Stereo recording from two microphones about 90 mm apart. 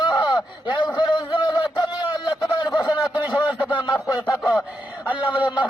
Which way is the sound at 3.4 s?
15° right (ahead or behind).